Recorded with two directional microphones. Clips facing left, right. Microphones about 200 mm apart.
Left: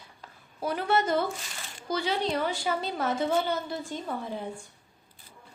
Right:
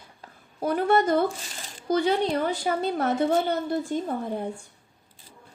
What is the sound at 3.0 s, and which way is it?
A woman's voice, 60° right (ahead or behind).